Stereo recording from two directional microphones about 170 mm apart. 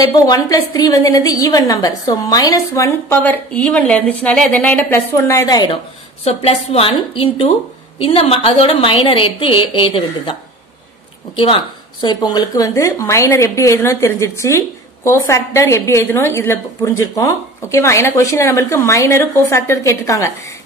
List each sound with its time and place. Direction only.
0.0 s a woman's voice: 20° left (ahead or behind)
6.2 s a woman's voice: 35° left (ahead or behind)
11.3 s a woman's voice: 30° left (ahead or behind)